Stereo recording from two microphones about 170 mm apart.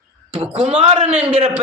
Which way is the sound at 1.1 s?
10° right (ahead or behind).